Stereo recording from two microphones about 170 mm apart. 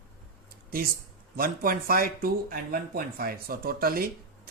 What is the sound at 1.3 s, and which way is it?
Speech, 60° right (ahead or behind).